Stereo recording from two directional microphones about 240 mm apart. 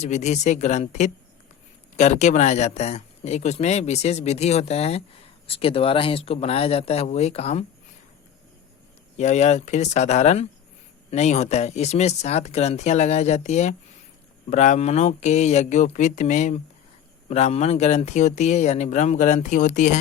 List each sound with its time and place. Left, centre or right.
0.0 s speech: left
9.1 s speech: left